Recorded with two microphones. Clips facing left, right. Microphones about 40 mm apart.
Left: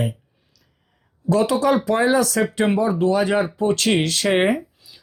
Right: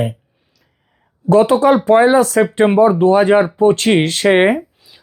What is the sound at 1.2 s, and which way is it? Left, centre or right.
Speech, right.